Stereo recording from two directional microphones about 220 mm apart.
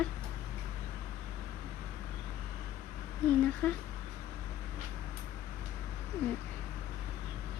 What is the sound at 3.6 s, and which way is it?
Speech, 10° left (ahead or behind).